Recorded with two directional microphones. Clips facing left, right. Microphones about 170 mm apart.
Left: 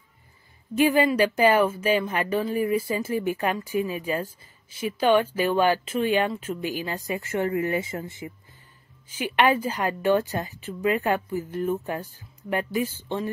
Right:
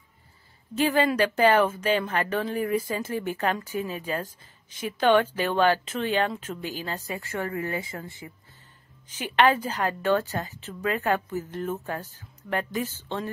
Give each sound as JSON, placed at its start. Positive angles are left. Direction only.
{"t": 0.7, "sound": "a woman's voice", "side_deg": 10}